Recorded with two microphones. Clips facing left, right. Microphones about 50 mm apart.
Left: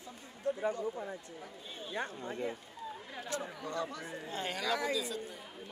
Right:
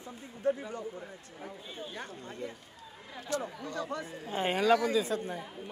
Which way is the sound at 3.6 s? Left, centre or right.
Left.